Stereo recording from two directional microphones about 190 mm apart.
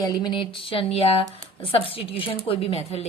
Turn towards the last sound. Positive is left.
turn(degrees=35)  # may be behind; listen again after turning